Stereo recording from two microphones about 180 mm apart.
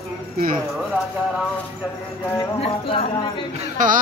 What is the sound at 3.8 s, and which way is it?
Speech, 45° right (ahead or behind).